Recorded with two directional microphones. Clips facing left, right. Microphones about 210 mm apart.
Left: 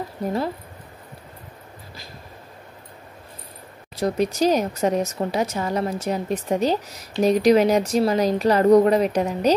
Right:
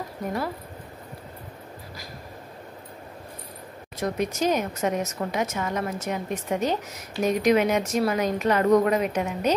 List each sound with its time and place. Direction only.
3.9 s speech: 35° left (ahead or behind)